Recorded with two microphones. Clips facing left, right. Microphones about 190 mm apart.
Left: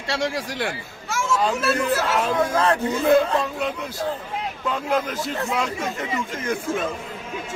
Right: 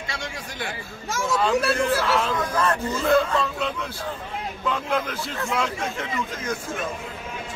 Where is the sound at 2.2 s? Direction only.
40° left (ahead or behind).